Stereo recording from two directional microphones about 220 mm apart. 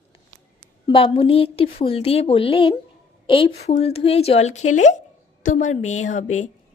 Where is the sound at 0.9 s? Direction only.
25° left (ahead or behind).